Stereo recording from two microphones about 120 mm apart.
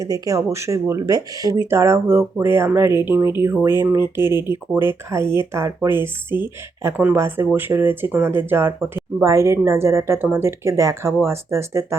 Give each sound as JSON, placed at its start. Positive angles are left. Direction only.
{"t": 0.0, "sound": "speech", "side_deg": -30}